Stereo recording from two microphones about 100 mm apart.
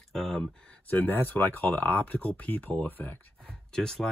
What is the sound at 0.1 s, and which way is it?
Speech, 5° left (ahead or behind).